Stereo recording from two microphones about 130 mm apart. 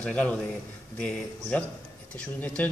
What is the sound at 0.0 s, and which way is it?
Speech, 10° left (ahead or behind).